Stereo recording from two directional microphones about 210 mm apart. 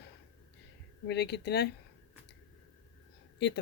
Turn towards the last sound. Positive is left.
turn(degrees=55)  # may be behind; listen again after turning